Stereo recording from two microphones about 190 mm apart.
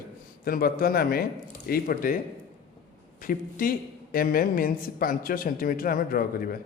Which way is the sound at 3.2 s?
50° left (ahead or behind).